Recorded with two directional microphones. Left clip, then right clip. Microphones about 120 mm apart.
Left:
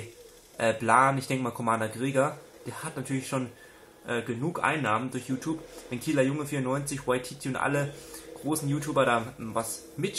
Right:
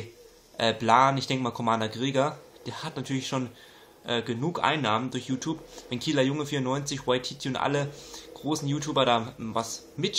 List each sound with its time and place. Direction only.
0.6 s speech: 25° right (ahead or behind)